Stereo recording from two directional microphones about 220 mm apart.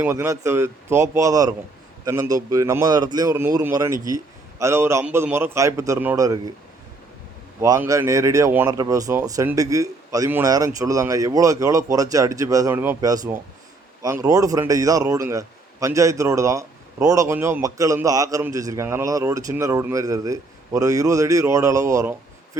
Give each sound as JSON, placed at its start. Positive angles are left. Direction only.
{"t": 0.0, "sound": "a man's voice", "side_deg": -10}
{"t": 7.6, "sound": "a man's voice", "side_deg": -15}